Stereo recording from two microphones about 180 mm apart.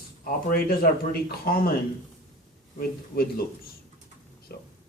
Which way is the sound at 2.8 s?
55° left (ahead or behind).